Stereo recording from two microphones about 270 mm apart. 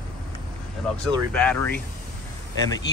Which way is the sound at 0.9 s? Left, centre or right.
Centre.